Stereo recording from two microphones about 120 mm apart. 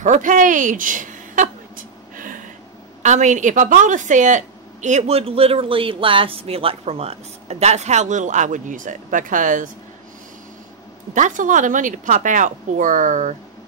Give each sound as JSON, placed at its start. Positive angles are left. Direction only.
{"t": 0.0, "sound": "speech", "side_deg": -90}
{"t": 3.0, "sound": "a woman's voice", "side_deg": -90}
{"t": 11.1, "sound": "speech", "side_deg": -90}